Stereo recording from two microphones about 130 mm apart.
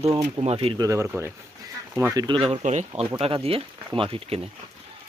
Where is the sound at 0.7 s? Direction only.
25° right (ahead or behind).